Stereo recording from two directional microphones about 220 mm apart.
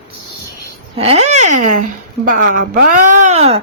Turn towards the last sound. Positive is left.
turn(degrees=-30)  # may be behind; listen again after turning